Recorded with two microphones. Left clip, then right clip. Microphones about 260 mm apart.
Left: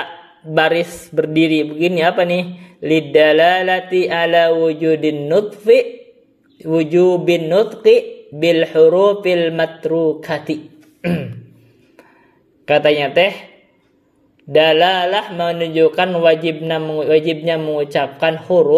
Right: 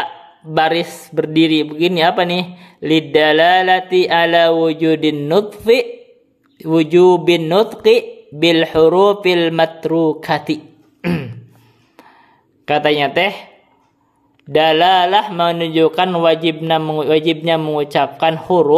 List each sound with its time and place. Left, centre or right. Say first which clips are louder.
0.6 s speech: even; centre
12.6 s speech: left 1 dB; centre
14.5 s speech: even; centre